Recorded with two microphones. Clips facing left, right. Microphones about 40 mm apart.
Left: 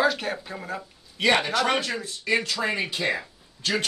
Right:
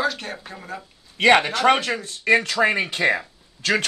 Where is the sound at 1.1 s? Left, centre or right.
Right.